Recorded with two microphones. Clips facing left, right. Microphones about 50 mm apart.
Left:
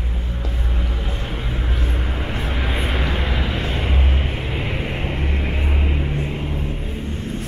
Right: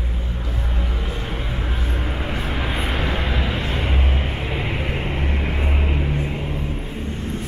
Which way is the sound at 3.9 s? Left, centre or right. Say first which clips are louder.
Even; centre.